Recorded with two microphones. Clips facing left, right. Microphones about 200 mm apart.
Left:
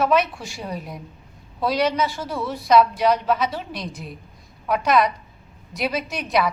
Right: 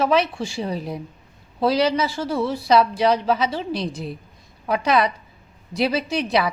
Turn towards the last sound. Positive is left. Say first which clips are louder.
# right 1 dB
turn(degrees=-30)  # may be behind; listen again after turning